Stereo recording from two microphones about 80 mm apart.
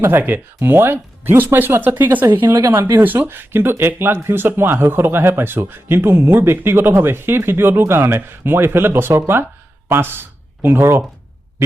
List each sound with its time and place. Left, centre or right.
0.0 s speech: right